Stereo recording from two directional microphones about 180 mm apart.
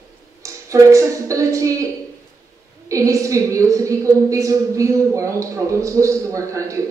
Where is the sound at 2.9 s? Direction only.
15° right (ahead or behind).